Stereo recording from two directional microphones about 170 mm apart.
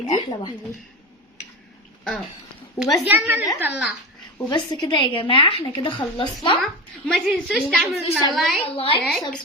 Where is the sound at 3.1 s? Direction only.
10° right (ahead or behind).